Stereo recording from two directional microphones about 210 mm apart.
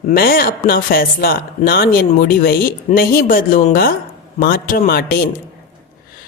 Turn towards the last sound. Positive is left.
turn(degrees=45)  # may be behind; listen again after turning